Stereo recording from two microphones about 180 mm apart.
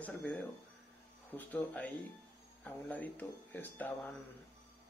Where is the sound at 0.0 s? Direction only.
10° left (ahead or behind).